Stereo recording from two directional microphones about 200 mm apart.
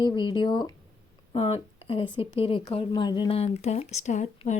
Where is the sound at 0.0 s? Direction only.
20° left (ahead or behind).